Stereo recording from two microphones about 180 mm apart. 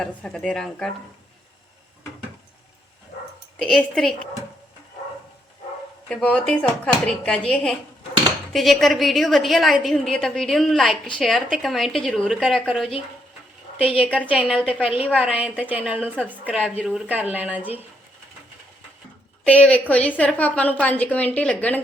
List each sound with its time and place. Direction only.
0.0 s a woman's voice: 5° left (ahead or behind)
3.6 s a woman's voice: 5° left (ahead or behind)
6.1 s a woman's voice: 5° left (ahead or behind)
13.7 s a woman's voice: 30° left (ahead or behind)
14.2 s a woman's voice: 10° right (ahead or behind)
19.5 s a woman's voice: 10° left (ahead or behind)